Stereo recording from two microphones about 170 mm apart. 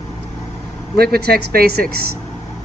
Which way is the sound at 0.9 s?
70° right (ahead or behind).